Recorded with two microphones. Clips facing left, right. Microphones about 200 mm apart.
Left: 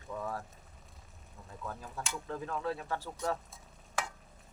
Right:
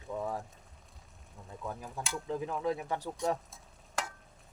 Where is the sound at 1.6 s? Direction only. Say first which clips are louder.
Right 2 dB; 15° right (ahead or behind).